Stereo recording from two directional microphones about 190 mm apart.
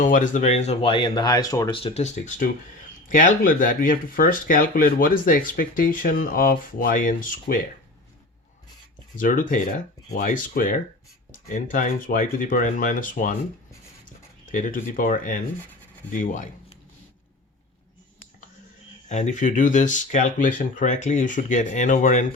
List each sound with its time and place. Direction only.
0.0 s speech: 45° left (ahead or behind); by 1.8 s 20° left (ahead or behind)
1.8 s speech: 35° left (ahead or behind)
9.1 s speech: 45° left (ahead or behind)
14.4 s speech: 45° left (ahead or behind)
19.0 s speech: 40° left (ahead or behind)